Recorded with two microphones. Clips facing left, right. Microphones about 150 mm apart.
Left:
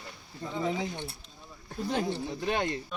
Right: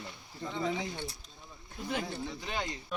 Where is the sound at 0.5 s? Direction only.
20° left (ahead or behind).